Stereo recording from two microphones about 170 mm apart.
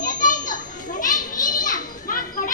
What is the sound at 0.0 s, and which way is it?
Children playing, 50° left (ahead or behind).